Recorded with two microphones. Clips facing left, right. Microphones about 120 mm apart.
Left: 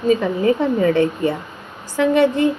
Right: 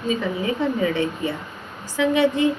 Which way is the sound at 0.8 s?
45° left (ahead or behind).